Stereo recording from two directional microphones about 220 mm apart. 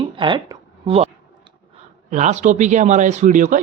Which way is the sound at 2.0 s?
30° right (ahead or behind).